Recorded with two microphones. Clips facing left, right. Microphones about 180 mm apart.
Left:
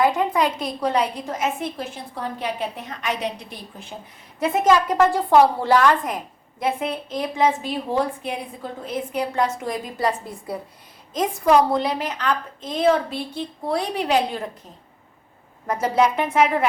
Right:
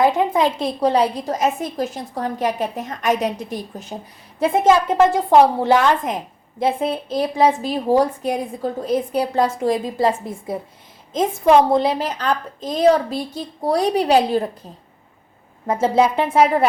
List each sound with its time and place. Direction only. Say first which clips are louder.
0.0 s a woman's voice: right 3 dB; 25° right (ahead or behind); by 3.9 s 40° right (ahead or behind)
4.4 s a woman's voice: right 3 dB; 30° right (ahead or behind)
6.6 s a woman's voice: right 4 dB; 30° right (ahead or behind)
15.6 s a woman's voice: right 3 dB; 25° right (ahead or behind)